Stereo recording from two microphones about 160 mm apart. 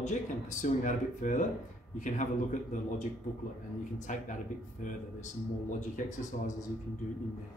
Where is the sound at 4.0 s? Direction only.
50° left (ahead or behind).